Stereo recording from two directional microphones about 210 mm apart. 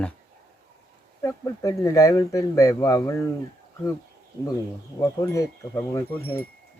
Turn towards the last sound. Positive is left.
turn(degrees=10)  # may be behind; listen again after turning